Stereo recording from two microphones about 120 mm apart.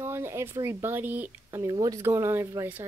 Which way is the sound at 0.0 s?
20° right (ahead or behind).